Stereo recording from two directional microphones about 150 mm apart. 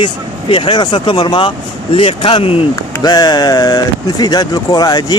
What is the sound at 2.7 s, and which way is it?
Speech, 25° left (ahead or behind).